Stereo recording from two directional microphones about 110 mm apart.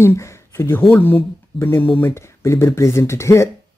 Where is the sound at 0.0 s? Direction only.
25° left (ahead or behind).